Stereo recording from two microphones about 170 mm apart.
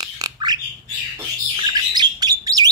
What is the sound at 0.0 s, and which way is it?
Squawk, 25° right (ahead or behind).